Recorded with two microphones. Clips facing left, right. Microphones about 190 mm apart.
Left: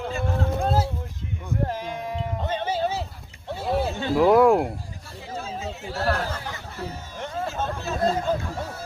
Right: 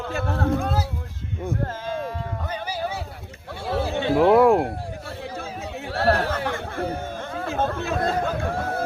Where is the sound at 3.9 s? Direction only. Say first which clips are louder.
Right 3 dB; 65° right (ahead or behind).